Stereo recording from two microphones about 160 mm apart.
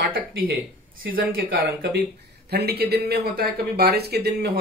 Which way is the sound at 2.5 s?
85° right.